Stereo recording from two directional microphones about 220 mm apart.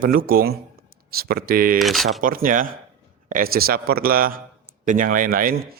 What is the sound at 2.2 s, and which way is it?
A man's voice, 40° right (ahead or behind).